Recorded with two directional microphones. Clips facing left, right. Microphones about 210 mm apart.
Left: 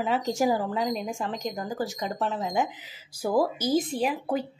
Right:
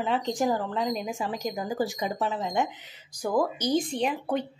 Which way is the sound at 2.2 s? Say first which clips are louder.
Left 1 dB; centre (ahead or behind).